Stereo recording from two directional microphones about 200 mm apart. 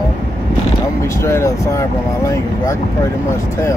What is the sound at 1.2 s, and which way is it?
Speech, 15° left (ahead or behind).